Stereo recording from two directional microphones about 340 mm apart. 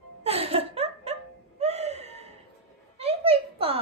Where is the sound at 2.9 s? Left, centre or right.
Centre.